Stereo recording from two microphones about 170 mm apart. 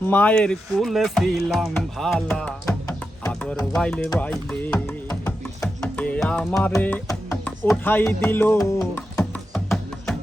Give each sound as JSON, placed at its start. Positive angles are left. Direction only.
{"t": 0.0, "sound": "speech", "side_deg": 10}
{"t": 3.2, "sound": "music", "side_deg": 5}
{"t": 6.7, "sound": "music", "side_deg": 15}